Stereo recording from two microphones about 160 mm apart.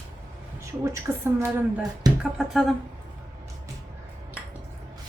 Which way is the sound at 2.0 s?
25° right (ahead or behind).